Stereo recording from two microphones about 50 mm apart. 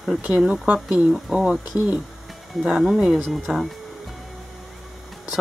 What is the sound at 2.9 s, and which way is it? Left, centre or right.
Speech, centre.